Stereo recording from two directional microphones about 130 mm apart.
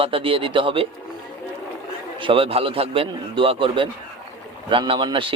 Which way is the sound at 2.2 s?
45° right (ahead or behind).